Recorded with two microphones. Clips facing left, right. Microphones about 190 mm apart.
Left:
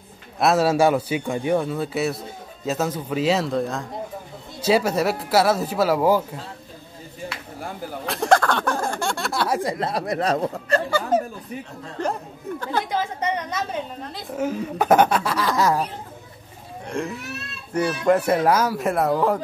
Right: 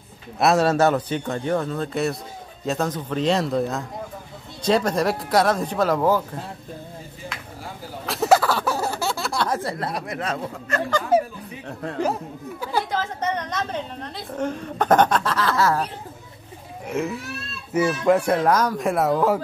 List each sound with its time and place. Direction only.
0.4 s a woman's voice: centre (ahead or behind)
8.1 s a sound: 5° right (ahead or behind)
9.6 s speech: 20° left (ahead or behind)
9.9 s speech: 35° left (ahead or behind)
11.1 s music: 10° right (ahead or behind)
12.0 s speech: 5° right (ahead or behind)
12.9 s a woman's voice: 10° left (ahead or behind)
16.8 s a man's voice: 5° right (ahead or behind)